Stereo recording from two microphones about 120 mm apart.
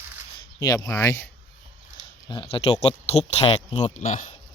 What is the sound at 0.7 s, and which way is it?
Speech, 30° left (ahead or behind).